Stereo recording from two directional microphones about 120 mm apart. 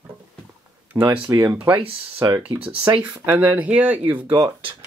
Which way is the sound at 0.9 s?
20° right (ahead or behind).